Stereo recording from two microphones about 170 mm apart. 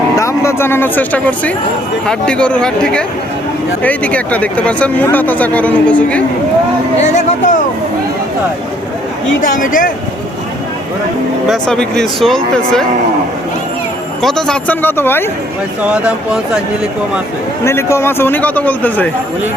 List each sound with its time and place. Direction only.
0.2 s speech: 15° left (ahead or behind)
7.1 s speech: 45° left (ahead or behind)
9.4 s speech: 50° left (ahead or behind)
11.4 s speech: centre (ahead or behind)
14.2 s speech: 5° left (ahead or behind)
17.7 s speech: 15° left (ahead or behind)